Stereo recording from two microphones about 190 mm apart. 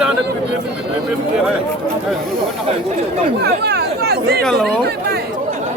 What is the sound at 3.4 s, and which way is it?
Chatter, 60° right (ahead or behind).